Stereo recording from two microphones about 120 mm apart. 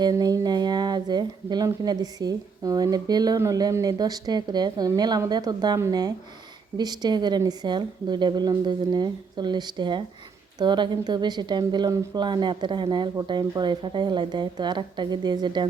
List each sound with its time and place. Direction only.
0.0 s speech: 35° right (ahead or behind)